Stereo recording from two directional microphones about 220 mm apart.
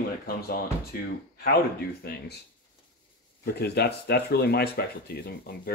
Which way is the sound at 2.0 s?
45° left (ahead or behind).